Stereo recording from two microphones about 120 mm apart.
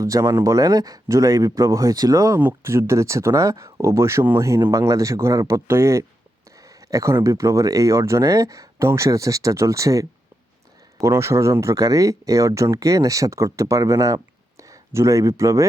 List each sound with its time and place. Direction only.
0.0 s speech: 30° right (ahead or behind)